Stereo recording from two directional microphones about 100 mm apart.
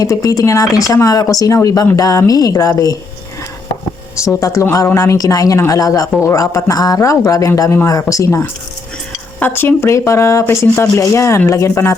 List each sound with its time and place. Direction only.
0.0 s speech: 35° left (ahead or behind)
4.2 s speech: 35° left (ahead or behind)